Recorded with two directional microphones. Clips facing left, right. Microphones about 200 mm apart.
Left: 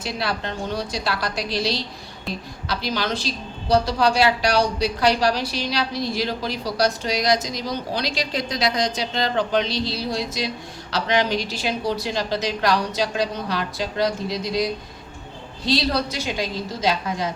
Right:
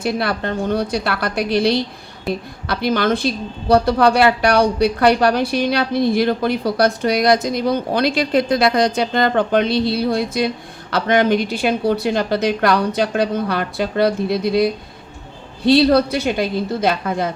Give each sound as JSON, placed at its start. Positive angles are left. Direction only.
{"t": 0.0, "sound": "a woman's voice", "side_deg": -55}